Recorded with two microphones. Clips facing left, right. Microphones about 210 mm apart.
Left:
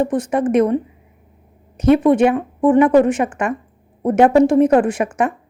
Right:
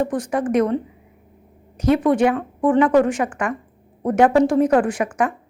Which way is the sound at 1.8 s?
25° left (ahead or behind).